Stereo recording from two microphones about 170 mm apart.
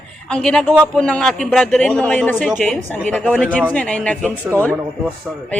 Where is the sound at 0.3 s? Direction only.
5° left (ahead or behind).